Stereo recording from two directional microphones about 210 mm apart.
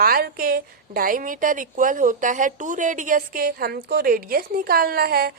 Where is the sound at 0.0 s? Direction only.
45° right (ahead or behind).